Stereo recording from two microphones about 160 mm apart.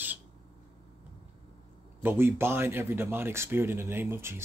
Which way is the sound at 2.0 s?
15° right (ahead or behind).